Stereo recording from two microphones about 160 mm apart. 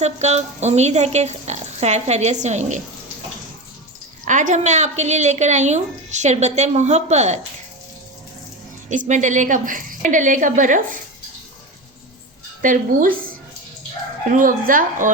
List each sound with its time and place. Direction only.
0.0 s a woman's voice: 45° right (ahead or behind)
4.3 s a woman's voice: 50° right (ahead or behind)
8.9 s a woman's voice: 50° right (ahead or behind)
12.6 s a woman's voice: 55° right (ahead or behind)
14.3 s a woman's voice: 60° right (ahead or behind)